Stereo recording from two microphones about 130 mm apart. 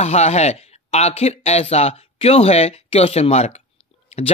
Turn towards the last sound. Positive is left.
turn(degrees=55)  # may be behind; listen again after turning